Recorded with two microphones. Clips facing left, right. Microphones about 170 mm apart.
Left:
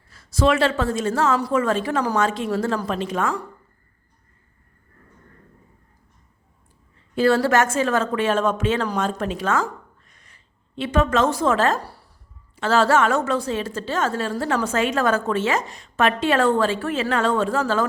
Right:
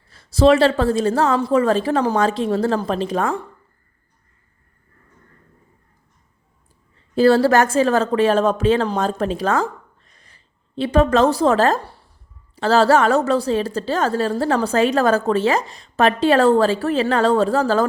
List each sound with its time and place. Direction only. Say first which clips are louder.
0.1 s a woman's voice: right 6 dB; 30° right (ahead or behind)
7.2 s a woman's voice: right 4 dB; 35° right (ahead or behind)